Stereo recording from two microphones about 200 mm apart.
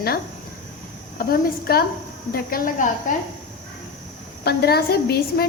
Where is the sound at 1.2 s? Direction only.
50° left (ahead or behind).